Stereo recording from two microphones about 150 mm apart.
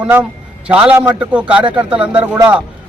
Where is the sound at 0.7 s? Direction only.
10° right (ahead or behind).